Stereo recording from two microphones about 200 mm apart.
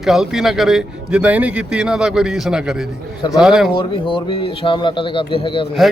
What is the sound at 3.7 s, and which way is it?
Speech, 25° left (ahead or behind).